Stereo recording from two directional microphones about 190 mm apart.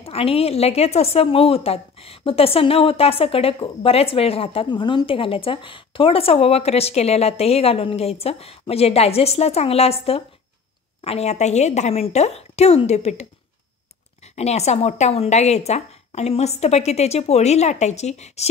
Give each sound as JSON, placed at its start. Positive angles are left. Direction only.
{"t": 0.0, "sound": "a woman's voice", "side_deg": 30}
{"t": 14.3, "sound": "a woman's voice", "side_deg": 35}